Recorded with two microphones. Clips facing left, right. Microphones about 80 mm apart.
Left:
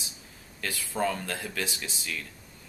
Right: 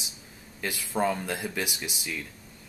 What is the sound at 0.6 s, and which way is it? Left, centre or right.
Speech, centre.